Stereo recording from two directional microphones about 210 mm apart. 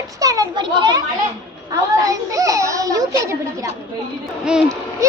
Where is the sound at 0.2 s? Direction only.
15° right (ahead or behind).